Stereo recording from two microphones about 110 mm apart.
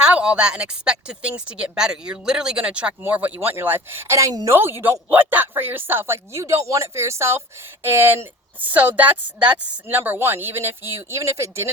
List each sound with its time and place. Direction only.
0.0 s speech: 10° right (ahead or behind); by 11.7 s 25° right (ahead or behind)